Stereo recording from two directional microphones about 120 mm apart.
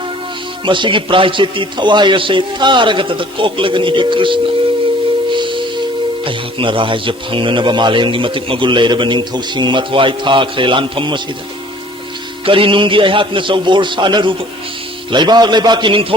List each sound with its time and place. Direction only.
0.6 s a man's voice: 45° right (ahead or behind)
5.3 s singing bowl: 45° right (ahead or behind)
6.2 s a man's voice: 45° right (ahead or behind)
12.5 s a man's voice: 45° right (ahead or behind)